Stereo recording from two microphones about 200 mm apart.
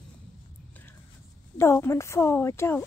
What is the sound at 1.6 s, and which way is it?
Speech, 15° left (ahead or behind).